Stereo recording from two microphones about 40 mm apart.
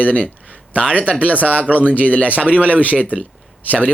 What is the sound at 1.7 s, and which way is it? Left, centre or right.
Speech, right.